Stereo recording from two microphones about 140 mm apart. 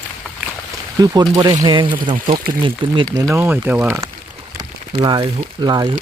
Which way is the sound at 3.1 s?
20° right (ahead or behind).